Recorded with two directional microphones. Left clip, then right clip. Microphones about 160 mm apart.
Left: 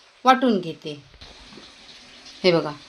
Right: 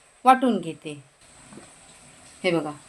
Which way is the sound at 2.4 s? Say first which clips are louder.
Left 5 dB; 30° left (ahead or behind).